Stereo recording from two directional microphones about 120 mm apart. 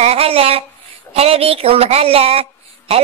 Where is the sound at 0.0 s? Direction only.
55° right (ahead or behind).